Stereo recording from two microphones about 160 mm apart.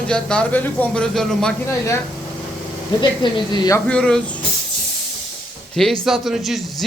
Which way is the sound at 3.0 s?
25° left (ahead or behind).